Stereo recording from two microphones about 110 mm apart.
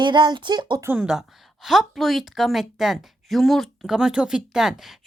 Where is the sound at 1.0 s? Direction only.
5° right (ahead or behind).